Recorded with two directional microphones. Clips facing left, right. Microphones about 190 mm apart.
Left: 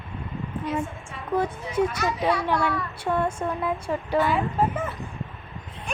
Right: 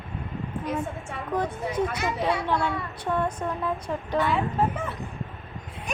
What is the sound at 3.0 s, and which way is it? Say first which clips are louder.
A child's voice: left 2 dB; 5° left (ahead or behind).